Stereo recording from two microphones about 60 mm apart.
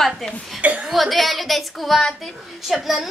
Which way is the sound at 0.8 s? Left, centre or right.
Centre.